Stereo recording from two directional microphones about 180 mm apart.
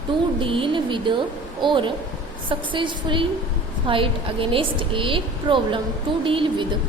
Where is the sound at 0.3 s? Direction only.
30° right (ahead or behind).